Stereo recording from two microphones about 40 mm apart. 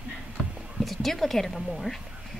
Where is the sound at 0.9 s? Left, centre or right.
Centre.